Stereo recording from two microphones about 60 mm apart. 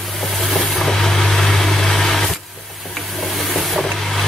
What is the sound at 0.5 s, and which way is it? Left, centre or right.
Vehicle, centre.